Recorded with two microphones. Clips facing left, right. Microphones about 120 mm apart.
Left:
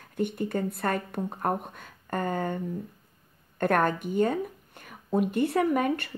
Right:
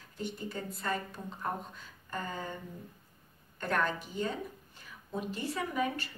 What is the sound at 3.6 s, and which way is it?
Speech, 55° left (ahead or behind).